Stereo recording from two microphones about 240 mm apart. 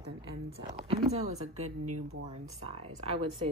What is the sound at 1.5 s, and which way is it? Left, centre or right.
Speech, right.